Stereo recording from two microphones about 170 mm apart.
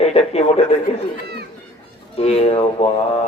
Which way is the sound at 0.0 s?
40° left (ahead or behind).